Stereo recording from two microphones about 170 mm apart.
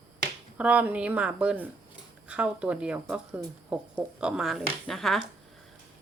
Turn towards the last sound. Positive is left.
turn(degrees=0)  # may be behind; listen again after turning